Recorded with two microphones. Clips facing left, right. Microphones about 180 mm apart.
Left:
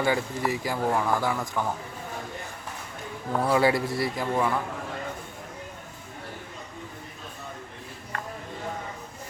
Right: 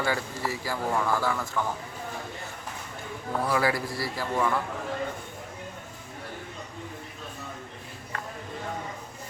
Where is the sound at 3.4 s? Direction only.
25° left (ahead or behind).